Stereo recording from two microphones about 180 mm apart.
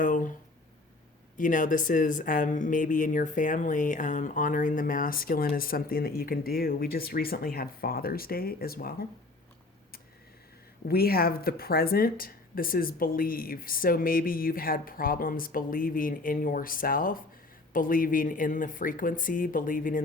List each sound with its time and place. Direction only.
0.0 s a sound: 50° left (ahead or behind)
1.4 s speech: 45° left (ahead or behind)
10.8 s speech: 55° left (ahead or behind)